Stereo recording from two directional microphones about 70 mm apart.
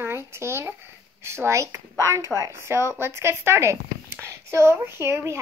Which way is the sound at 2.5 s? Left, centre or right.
Right.